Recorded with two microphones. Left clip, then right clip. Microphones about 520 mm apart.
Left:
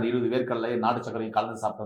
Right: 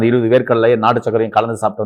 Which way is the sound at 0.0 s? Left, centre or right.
Right.